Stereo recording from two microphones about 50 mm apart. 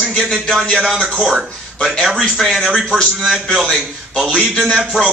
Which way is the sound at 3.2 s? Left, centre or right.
Centre.